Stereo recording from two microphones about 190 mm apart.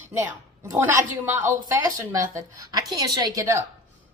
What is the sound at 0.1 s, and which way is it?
A woman's voice, 15° right (ahead or behind).